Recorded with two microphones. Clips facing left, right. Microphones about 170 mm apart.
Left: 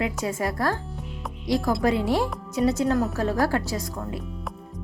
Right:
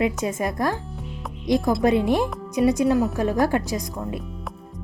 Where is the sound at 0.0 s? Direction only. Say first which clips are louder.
Right 3 dB; 20° right (ahead or behind).